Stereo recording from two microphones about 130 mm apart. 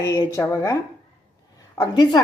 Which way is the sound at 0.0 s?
20° left (ahead or behind).